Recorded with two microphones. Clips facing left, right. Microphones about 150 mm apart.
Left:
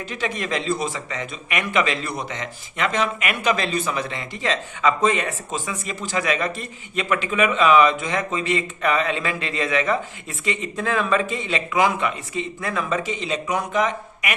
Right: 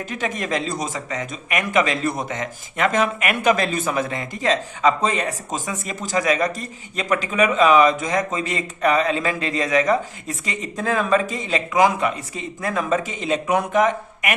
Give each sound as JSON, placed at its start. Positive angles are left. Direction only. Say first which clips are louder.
{"t": 0.1, "sound": "a man's voice", "louder": "right 1 dB", "side_deg": -45}